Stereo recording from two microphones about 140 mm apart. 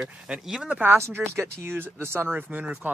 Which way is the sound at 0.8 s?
15° right (ahead or behind).